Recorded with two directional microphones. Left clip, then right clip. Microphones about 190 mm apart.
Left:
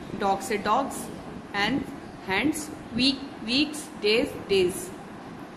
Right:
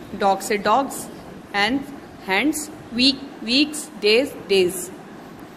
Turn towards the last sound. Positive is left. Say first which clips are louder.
# right 5 dB
turn(degrees=-40)  # may be behind; listen again after turning